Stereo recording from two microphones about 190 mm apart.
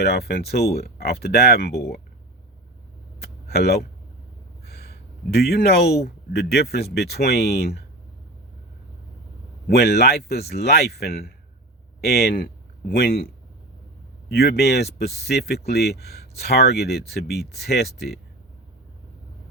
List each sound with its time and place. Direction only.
0.0 s speech: 55° left (ahead or behind)
3.2 s a sound: 55° left (ahead or behind)
6.3 s speech: 55° left (ahead or behind)
9.6 s speech: 55° left (ahead or behind)